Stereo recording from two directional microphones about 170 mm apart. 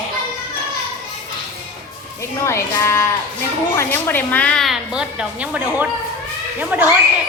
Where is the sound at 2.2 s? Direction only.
15° left (ahead or behind); by 6.8 s 10° right (ahead or behind).